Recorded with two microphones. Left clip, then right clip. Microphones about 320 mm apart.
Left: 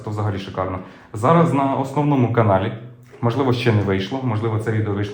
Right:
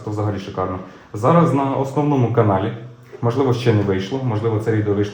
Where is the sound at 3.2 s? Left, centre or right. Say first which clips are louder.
Right 1 dB; centre.